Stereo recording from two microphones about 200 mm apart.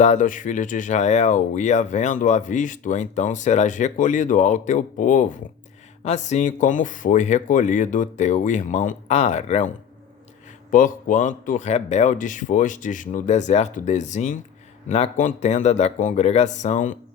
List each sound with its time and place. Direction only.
0.0 s speech: 40° left (ahead or behind)